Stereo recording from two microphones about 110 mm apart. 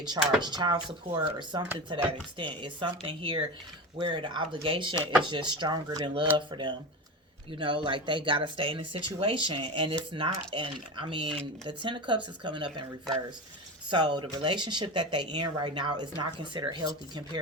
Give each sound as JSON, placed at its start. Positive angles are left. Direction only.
{"t": 0.4, "sound": "speech", "side_deg": -40}